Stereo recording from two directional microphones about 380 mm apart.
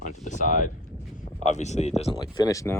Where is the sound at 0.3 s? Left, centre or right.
Centre.